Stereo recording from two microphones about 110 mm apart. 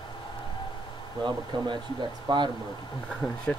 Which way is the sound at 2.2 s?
45° right (ahead or behind).